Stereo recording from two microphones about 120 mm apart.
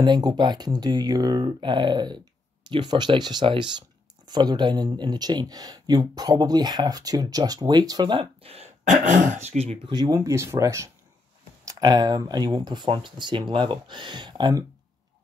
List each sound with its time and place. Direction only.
0.0 s speech: 35° right (ahead or behind); by 8.6 s 55° right (ahead or behind)
8.8 s speech: 90° right; by 9.8 s 65° right (ahead or behind)
9.8 s speech: 35° right (ahead or behind)